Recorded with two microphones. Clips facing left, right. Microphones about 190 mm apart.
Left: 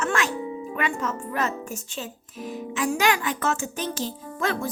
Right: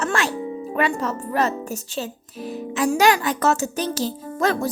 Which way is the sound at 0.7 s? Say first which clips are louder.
Right 6 dB; 35° right (ahead or behind).